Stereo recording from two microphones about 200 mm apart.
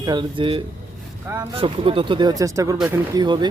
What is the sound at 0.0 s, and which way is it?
Speech, 20° right (ahead or behind).